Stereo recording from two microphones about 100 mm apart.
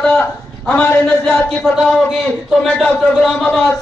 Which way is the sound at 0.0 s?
10° left (ahead or behind).